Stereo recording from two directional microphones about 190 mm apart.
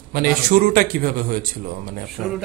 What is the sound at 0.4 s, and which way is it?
Speech, 50° right (ahead or behind).